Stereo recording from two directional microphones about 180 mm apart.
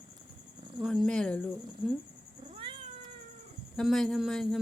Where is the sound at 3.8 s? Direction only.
Centre (ahead or behind).